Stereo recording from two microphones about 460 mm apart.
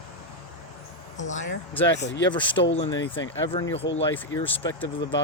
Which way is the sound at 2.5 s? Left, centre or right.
Left.